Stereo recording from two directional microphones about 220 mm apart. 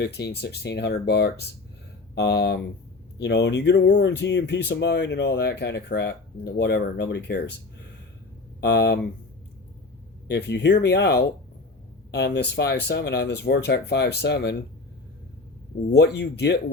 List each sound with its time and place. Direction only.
0.0 s speech: 50° left (ahead or behind)
8.6 s speech: 50° left (ahead or behind)
10.2 s speech: 50° left (ahead or behind)
15.9 s speech: 50° left (ahead or behind)